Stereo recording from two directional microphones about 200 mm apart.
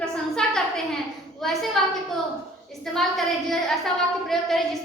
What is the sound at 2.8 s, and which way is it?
A woman's voice, centre (ahead or behind).